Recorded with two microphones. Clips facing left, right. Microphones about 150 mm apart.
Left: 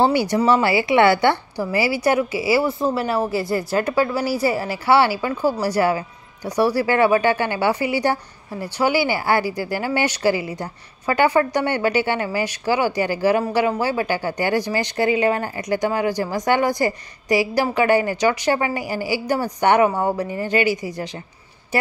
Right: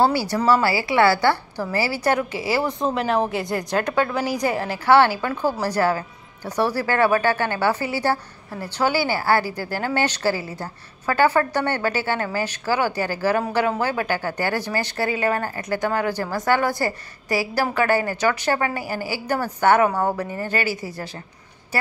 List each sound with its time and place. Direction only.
0.0 s a woman's voice: 20° left (ahead or behind)